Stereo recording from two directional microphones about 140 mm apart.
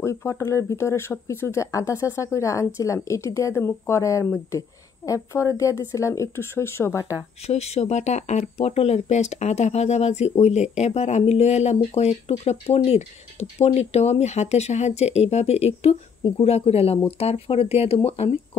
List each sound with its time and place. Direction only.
0.0 s speech: 20° left (ahead or behind)
7.4 s speech: 50° left (ahead or behind)